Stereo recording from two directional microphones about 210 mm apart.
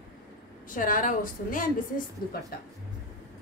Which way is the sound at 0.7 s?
40° left (ahead or behind).